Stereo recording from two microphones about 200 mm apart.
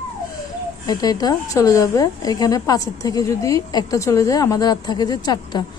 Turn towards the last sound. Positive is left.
turn(degrees=20)  # may be behind; listen again after turning